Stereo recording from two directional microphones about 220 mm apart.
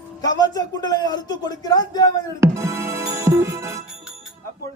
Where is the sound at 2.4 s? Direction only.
10° right (ahead or behind).